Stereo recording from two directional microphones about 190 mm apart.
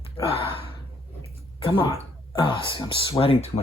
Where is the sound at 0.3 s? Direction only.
30° left (ahead or behind).